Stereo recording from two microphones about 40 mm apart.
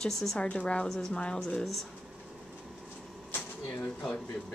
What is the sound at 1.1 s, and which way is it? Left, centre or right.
Speech, left.